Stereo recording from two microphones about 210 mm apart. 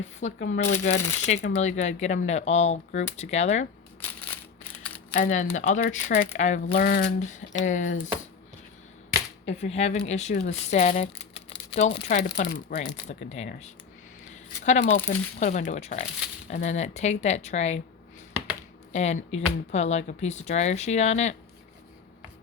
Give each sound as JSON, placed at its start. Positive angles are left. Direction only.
{"t": 0.0, "sound": "speech", "side_deg": 35}
{"t": 5.1, "sound": "speech", "side_deg": 35}
{"t": 9.5, "sound": "speech", "side_deg": 30}
{"t": 18.9, "sound": "speech", "side_deg": 35}